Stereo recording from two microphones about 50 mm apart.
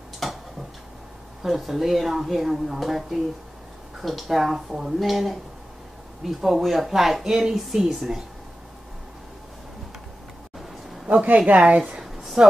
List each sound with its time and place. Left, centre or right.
0.2 s tick-tock: centre
1.4 s a woman's voice: centre
11.1 s speech: right
12.0 s a sound: centre